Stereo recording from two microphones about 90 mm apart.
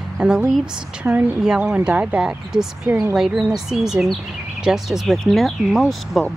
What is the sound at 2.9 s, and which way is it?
Speech, 25° right (ahead or behind).